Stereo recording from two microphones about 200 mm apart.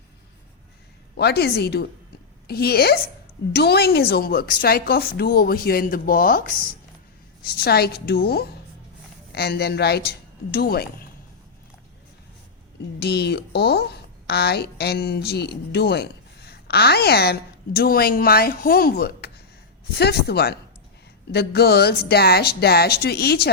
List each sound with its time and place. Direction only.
1.1 s a woman's voice: 55° left (ahead or behind)
13.0 s a woman's voice: 55° left (ahead or behind)